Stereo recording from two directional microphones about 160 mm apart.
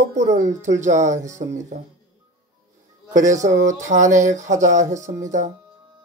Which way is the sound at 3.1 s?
50° right (ahead or behind).